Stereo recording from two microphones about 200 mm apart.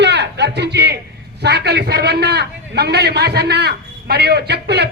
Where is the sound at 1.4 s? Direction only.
55° right (ahead or behind).